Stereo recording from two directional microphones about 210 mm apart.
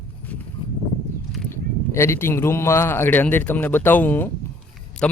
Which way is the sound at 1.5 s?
10° left (ahead or behind).